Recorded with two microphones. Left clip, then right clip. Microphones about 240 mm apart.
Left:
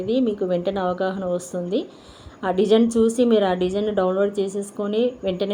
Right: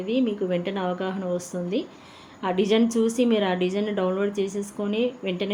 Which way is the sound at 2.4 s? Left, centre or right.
Centre.